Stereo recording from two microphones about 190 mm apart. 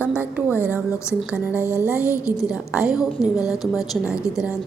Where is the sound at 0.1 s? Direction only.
10° right (ahead or behind).